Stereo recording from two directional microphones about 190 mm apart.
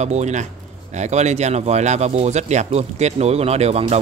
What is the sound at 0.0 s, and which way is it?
Speech, 35° right (ahead or behind).